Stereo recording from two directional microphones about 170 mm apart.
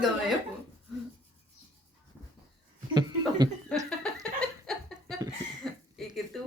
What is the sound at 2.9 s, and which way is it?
Speech, 25° right (ahead or behind).